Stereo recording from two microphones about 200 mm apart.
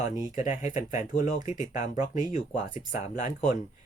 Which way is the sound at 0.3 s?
35° left (ahead or behind).